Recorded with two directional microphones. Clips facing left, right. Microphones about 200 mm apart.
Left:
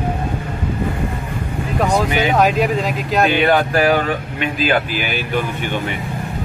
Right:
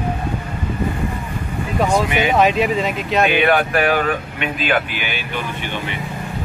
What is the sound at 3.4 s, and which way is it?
Speech, 30° left (ahead or behind).